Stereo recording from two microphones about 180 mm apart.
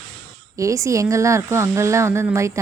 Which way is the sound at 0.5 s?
15° right (ahead or behind).